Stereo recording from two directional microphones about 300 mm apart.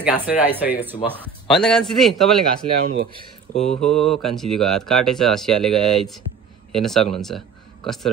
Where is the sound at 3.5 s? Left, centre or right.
Centre.